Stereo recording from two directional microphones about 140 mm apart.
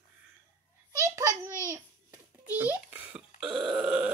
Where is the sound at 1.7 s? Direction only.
15° right (ahead or behind).